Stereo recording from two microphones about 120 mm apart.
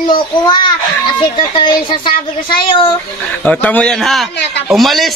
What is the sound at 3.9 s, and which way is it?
Speech, centre (ahead or behind).